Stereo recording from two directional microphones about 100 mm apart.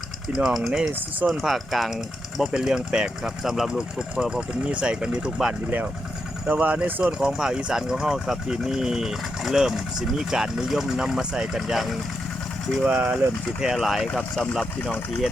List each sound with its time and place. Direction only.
0.3 s speech: centre (ahead or behind)
0.9 s speech: 20° right (ahead or behind)
1.3 s speech: centre (ahead or behind)